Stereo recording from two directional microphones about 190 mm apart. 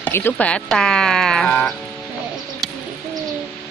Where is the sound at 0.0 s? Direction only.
10° left (ahead or behind).